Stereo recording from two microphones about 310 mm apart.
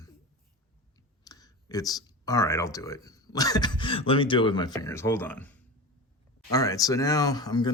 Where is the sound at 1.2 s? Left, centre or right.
Centre.